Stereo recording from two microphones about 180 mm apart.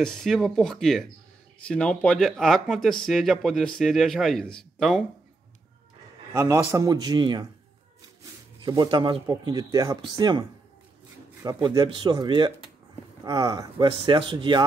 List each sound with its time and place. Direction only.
0.0 s speech: centre (ahead or behind)
6.3 s speech: 20° right (ahead or behind)
8.6 s speech: 25° right (ahead or behind)
11.4 s speech: 20° right (ahead or behind)